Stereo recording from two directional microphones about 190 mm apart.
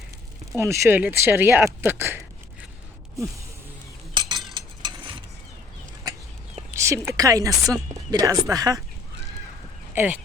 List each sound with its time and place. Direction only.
0.5 s speech: 15° right (ahead or behind)
4.1 s cutlery: 25° right (ahead or behind)
4.5 s mechanisms: 25° right (ahead or behind)
6.7 s speech: 15° right (ahead or behind)
9.9 s speech: 10° right (ahead or behind)